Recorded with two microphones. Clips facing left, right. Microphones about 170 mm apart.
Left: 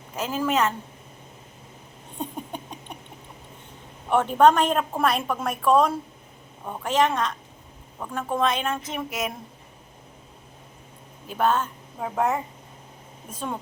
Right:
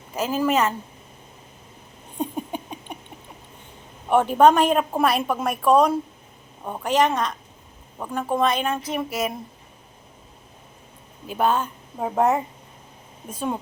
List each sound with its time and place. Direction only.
0.2 s a woman's voice: 5° right (ahead or behind)
2.3 s a sound: 5° right (ahead or behind)
4.1 s a woman's voice: 5° right (ahead or behind)
11.3 s speech: 10° right (ahead or behind)
12.0 s speech: 25° right (ahead or behind)